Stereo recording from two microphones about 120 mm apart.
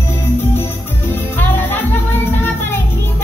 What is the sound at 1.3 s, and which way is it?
Music, 15° left (ahead or behind).